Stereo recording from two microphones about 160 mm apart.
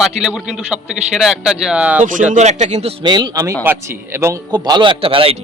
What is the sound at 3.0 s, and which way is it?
A man's voice, 25° right (ahead or behind).